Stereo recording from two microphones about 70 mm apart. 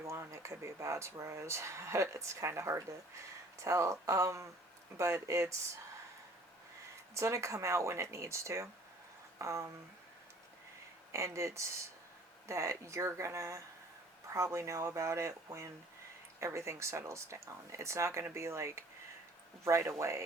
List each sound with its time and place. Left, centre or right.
0.0 s speech: right
7.1 s speech: right
11.1 s speech: right